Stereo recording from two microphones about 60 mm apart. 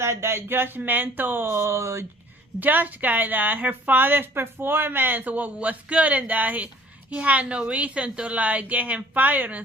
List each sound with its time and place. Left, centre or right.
0.0 s a woman's voice: right
2.6 s a woman's voice: right